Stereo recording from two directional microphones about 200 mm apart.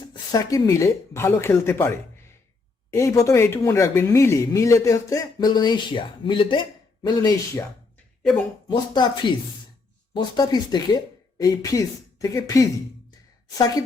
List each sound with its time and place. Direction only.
0.1 s speech: 20° left (ahead or behind)
2.9 s speech: 15° left (ahead or behind)
8.6 s speech: 20° left (ahead or behind)